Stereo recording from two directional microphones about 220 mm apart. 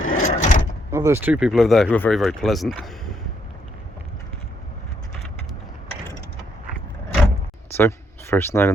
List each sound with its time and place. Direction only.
0.0 s a sound: 35° left (ahead or behind)
0.9 s speech: 10° right (ahead or behind)
7.7 s speech: 10° left (ahead or behind)